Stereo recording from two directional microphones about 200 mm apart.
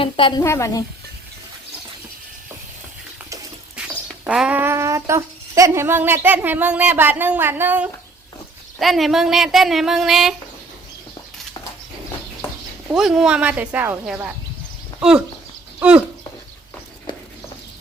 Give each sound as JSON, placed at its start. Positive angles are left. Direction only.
{"t": 0.0, "sound": "a woman's voice", "side_deg": 25}
{"t": 0.4, "sound": "speech", "side_deg": 15}
{"t": 3.8, "sound": "a sound", "side_deg": -5}
{"t": 8.8, "sound": "speech", "side_deg": 0}
{"t": 12.9, "sound": "speech", "side_deg": 0}